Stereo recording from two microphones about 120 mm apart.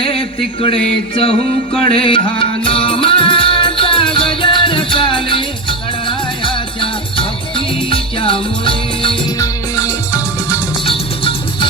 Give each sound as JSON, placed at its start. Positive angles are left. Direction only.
{"t": 0.0, "sound": "music", "side_deg": 50}
{"t": 9.4, "sound": "music", "side_deg": 30}
{"t": 10.8, "sound": "music", "side_deg": 50}